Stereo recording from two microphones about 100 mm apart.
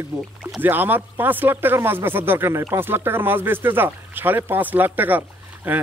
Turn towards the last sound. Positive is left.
turn(degrees=-20)  # may be behind; listen again after turning